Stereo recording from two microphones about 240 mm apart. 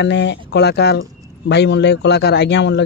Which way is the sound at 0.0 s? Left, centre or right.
Left.